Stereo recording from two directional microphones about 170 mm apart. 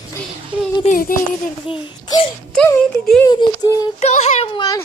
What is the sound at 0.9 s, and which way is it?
Speech, 55° left (ahead or behind).